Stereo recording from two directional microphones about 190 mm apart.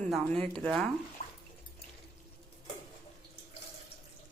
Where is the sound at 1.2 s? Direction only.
45° left (ahead or behind).